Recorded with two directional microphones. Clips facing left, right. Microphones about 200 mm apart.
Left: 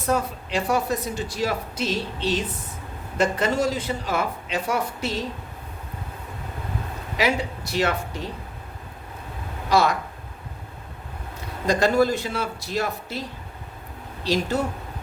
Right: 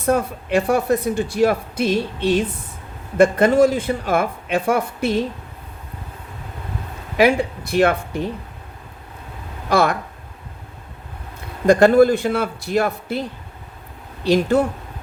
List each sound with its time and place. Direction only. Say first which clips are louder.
0.0 s speech: right 5 dB; 55° right (ahead or behind)
7.2 s speech: right 8 dB; 55° right (ahead or behind)
9.6 s speech: right 3 dB; 55° right (ahead or behind)
11.6 s speech: right 8 dB; 55° right (ahead or behind)
14.3 s speech: right 7 dB; 55° right (ahead or behind)